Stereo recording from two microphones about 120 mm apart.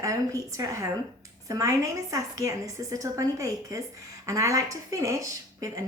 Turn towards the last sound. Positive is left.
turn(degrees=-30)  # may be behind; listen again after turning